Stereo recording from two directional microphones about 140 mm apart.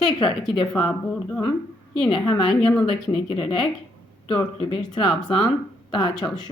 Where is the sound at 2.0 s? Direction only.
35° left (ahead or behind).